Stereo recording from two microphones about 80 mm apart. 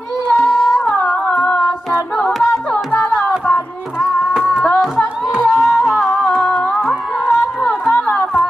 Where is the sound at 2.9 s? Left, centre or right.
Centre.